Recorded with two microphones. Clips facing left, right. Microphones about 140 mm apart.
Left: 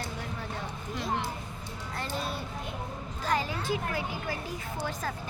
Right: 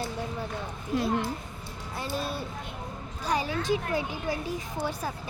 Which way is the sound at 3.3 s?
15° right (ahead or behind).